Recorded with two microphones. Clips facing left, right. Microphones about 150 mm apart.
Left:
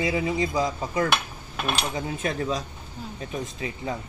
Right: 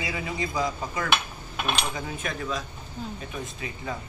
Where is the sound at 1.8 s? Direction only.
30° left (ahead or behind).